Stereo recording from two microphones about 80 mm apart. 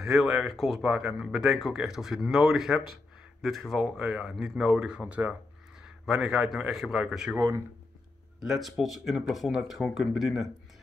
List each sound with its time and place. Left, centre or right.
0.0 s speech: centre
6.0 s speech: centre
7.3 s speech: right
8.4 s speech: centre